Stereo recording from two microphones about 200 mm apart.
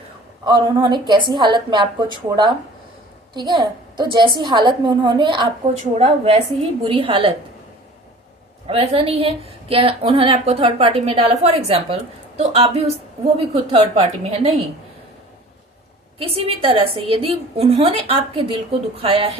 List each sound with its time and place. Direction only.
0.4 s a woman's voice: 20° right (ahead or behind)
8.6 s a woman's voice: 30° right (ahead or behind)
16.1 s a woman's voice: 30° right (ahead or behind)